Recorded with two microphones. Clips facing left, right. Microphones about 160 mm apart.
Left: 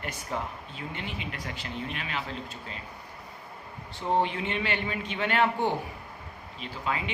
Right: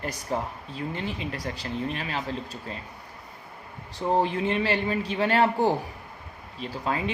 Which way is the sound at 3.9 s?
40° right (ahead or behind).